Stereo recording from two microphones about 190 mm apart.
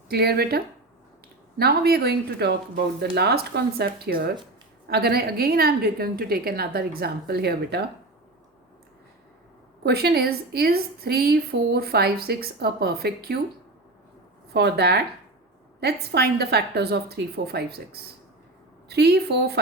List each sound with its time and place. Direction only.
0.1 s a woman's voice: 55° right (ahead or behind)
9.8 s a woman's voice: 60° right (ahead or behind)
14.5 s a woman's voice: 60° right (ahead or behind)